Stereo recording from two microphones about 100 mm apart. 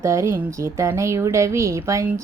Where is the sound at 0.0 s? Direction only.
30° right (ahead or behind).